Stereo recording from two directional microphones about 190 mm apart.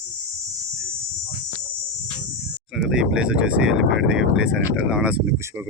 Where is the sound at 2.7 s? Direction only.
Centre (ahead or behind).